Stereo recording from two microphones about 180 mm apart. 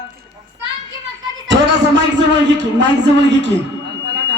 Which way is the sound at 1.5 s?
85° right.